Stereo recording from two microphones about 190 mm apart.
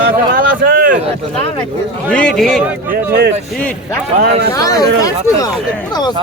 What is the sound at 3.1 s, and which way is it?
Speech, 60° right (ahead or behind).